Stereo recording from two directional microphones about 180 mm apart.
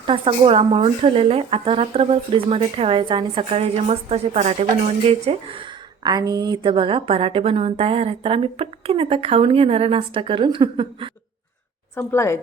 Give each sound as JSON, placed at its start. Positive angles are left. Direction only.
{"t": 0.0, "sound": "speech", "side_deg": -30}
{"t": 11.9, "sound": "a woman's voice", "side_deg": 15}